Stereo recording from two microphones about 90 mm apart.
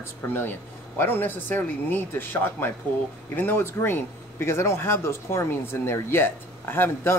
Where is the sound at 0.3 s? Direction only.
25° left (ahead or behind).